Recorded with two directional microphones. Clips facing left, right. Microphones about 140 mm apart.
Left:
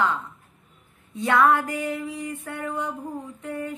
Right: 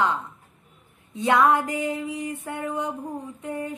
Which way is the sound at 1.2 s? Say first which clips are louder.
Even; 15° right (ahead or behind).